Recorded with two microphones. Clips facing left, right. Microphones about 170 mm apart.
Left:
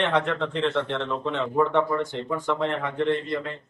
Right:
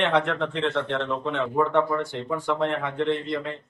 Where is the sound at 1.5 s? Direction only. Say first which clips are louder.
Even; centre (ahead or behind).